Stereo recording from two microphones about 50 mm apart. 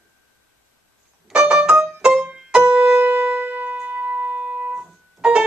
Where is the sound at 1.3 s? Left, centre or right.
Centre.